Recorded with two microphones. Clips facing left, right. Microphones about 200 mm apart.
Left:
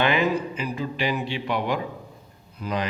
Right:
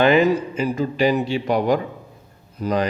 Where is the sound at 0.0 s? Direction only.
45° right (ahead or behind).